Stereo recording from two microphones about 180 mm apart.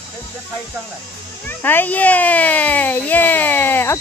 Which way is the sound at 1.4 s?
10° left (ahead or behind).